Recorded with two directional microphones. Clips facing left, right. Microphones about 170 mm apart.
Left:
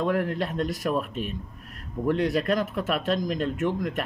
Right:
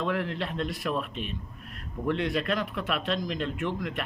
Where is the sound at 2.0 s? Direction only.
40° left (ahead or behind).